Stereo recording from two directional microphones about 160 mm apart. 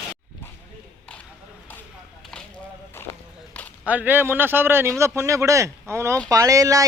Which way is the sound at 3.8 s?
10° right (ahead or behind).